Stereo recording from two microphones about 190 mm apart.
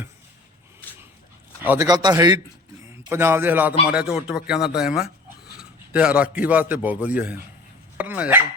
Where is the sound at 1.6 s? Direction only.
10° right (ahead or behind).